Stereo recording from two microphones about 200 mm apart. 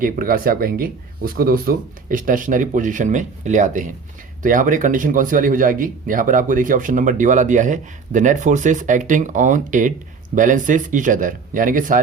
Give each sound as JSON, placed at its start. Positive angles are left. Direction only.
{"t": 0.0, "sound": "speech", "side_deg": -45}